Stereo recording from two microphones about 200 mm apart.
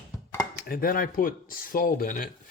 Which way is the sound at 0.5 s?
45° left (ahead or behind).